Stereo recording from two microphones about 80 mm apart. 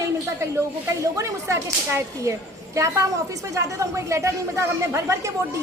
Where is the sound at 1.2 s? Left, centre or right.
Right.